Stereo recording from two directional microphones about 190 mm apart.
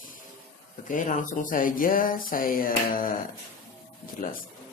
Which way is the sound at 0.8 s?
45° left (ahead or behind).